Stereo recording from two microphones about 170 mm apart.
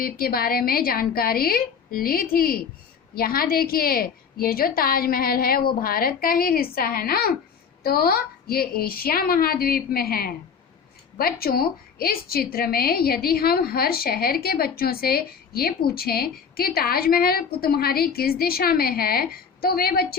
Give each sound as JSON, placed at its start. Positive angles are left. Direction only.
{"t": 0.0, "sound": "a woman's voice", "side_deg": 60}